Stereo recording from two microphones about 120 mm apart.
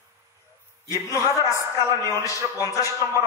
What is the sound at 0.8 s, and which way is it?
A man's voice, 25° left (ahead or behind).